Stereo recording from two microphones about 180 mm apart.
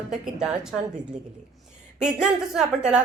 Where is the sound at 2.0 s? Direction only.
5° right (ahead or behind).